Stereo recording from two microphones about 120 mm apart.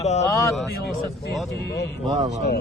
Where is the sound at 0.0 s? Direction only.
70° left (ahead or behind).